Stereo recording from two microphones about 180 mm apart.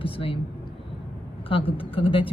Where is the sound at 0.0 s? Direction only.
30° left (ahead or behind).